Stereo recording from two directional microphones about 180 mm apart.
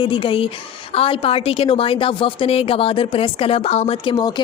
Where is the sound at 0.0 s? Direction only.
30° left (ahead or behind).